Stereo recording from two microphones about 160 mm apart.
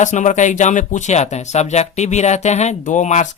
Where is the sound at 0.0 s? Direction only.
50° left (ahead or behind).